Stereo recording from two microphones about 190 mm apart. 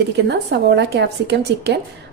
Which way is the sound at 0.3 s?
70° right (ahead or behind).